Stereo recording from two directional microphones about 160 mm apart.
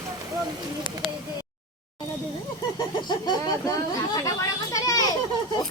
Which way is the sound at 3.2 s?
25° left (ahead or behind).